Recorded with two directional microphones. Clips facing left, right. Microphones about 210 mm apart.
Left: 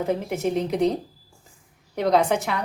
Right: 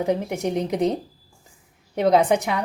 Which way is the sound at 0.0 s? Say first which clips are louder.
Right 1 dB; 15° right (ahead or behind).